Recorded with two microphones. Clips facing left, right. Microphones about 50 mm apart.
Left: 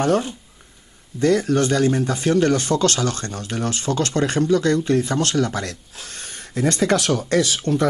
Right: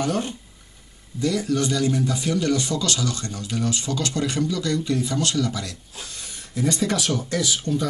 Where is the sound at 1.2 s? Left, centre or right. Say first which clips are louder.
Left 5 dB; left.